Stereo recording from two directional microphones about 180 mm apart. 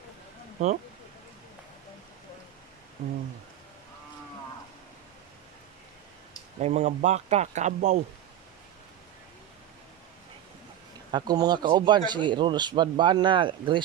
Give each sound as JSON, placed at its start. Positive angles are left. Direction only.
{"t": 3.0, "sound": "speech", "side_deg": -35}
{"t": 6.6, "sound": "speech", "side_deg": -40}
{"t": 11.1, "sound": "speech", "side_deg": -25}